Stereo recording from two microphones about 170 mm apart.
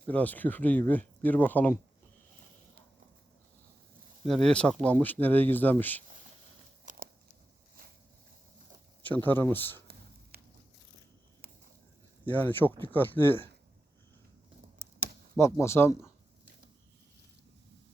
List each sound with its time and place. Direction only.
0.1 s speech: 10° left (ahead or behind)
4.3 s speech: 5° left (ahead or behind)
6.8 s biting: 55° right (ahead or behind)
9.0 s speech: 10° left (ahead or behind)
10.3 s a sound: 65° right (ahead or behind)
12.2 s speech: 10° left (ahead or behind)
15.4 s speech: 15° left (ahead or behind)